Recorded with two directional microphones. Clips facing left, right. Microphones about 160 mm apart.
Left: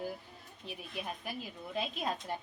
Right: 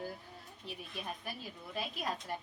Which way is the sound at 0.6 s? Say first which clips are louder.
Left 2 dB; 15° left (ahead or behind).